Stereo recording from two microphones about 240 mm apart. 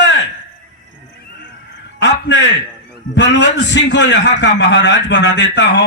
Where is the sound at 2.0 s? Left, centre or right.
Left.